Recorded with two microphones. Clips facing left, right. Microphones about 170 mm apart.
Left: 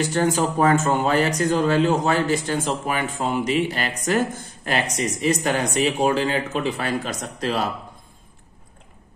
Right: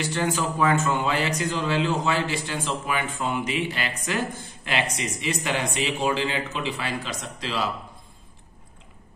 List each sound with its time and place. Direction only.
0.0 s speech: 40° left (ahead or behind)